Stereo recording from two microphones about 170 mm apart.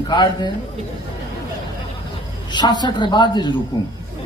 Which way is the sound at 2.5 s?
25° left (ahead or behind).